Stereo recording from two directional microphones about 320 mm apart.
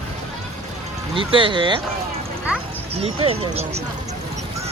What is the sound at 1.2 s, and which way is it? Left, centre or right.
Speech, centre.